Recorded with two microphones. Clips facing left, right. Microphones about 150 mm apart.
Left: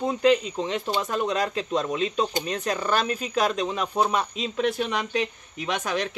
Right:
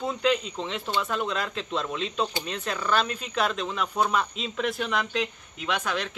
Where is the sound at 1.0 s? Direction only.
40° left (ahead or behind).